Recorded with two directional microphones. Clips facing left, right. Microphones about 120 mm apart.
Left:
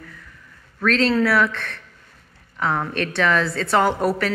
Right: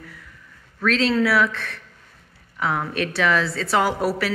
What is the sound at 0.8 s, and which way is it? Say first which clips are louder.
A woman's voice: left 1 dB; 5° right (ahead or behind).